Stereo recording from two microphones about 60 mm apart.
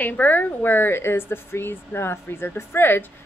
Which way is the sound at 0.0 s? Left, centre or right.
Left.